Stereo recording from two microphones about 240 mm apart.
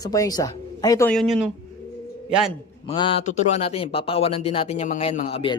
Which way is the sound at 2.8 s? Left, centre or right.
Centre.